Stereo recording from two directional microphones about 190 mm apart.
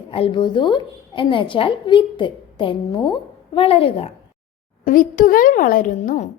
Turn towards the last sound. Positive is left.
turn(degrees=40)  # may be behind; listen again after turning